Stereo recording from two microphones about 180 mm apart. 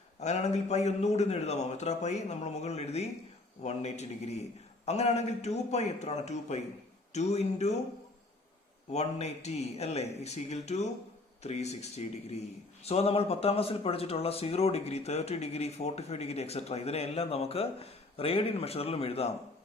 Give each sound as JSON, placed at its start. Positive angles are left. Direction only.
{"t": 0.2, "sound": "speech", "side_deg": 40}
{"t": 8.9, "sound": "speech", "side_deg": 35}